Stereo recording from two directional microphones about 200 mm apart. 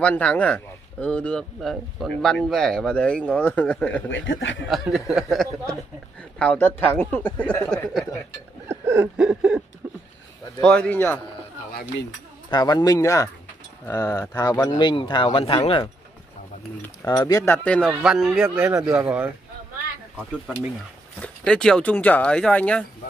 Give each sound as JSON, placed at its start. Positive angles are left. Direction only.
{"t": 0.0, "sound": "speech", "side_deg": 5}
{"t": 4.1, "sound": "speech", "side_deg": 70}
{"t": 4.6, "sound": "speech", "side_deg": 0}
{"t": 8.6, "sound": "a sound", "side_deg": -10}
{"t": 10.6, "sound": "speech", "side_deg": 5}
{"t": 12.4, "sound": "speech", "side_deg": 20}
{"t": 16.8, "sound": "speech", "side_deg": 15}
{"t": 17.6, "sound": "speech", "side_deg": 5}
{"t": 21.2, "sound": "speech", "side_deg": 5}